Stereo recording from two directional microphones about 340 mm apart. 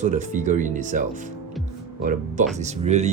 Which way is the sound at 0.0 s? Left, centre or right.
Right.